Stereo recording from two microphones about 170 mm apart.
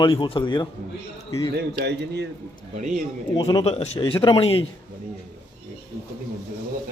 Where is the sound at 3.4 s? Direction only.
25° left (ahead or behind).